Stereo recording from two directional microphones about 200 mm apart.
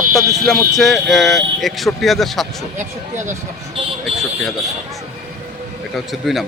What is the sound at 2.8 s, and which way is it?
Speech, 40° right (ahead or behind).